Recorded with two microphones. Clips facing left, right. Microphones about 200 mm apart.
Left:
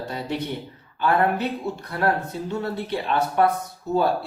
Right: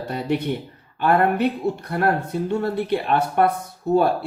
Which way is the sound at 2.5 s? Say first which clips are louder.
Right 5 dB; 55° right (ahead or behind).